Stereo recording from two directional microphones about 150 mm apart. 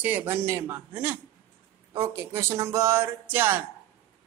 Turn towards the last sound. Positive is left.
turn(degrees=-15)  # may be behind; listen again after turning